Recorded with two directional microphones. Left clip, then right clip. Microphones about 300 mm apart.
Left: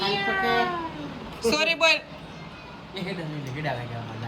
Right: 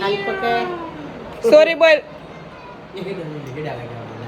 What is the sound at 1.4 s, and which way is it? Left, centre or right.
Speech, centre.